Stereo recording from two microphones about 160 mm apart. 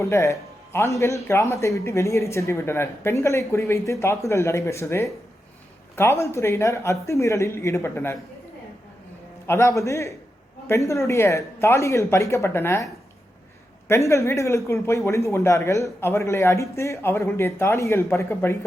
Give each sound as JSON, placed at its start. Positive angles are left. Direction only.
{"t": 0.0, "sound": "speech", "side_deg": 20}
{"t": 9.5, "sound": "speech", "side_deg": 20}